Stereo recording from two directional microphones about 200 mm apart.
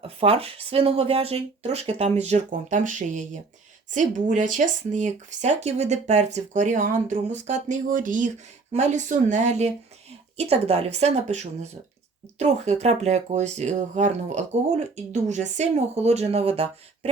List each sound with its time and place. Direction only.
0.2 s speech: 30° right (ahead or behind)